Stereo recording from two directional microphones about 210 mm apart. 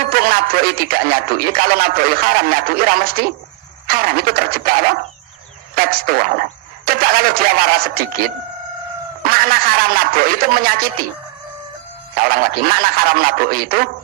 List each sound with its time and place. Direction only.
0.0 s speech: 45° right (ahead or behind)
12.1 s speech: 45° right (ahead or behind)